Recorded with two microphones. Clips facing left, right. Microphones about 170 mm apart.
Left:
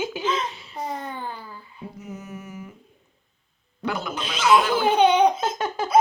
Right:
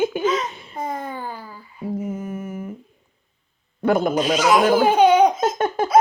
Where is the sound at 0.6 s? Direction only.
50° right (ahead or behind).